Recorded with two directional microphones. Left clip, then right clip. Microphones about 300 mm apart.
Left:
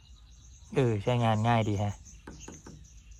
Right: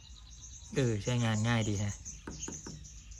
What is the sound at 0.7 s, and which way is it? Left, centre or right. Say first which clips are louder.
Speech: left 5 dB; centre.